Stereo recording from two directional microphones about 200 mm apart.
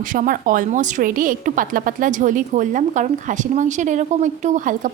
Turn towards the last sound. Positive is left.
turn(degrees=-40)  # may be behind; listen again after turning